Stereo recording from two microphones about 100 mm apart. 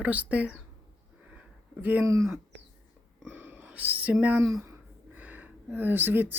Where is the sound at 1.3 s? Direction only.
15° right (ahead or behind).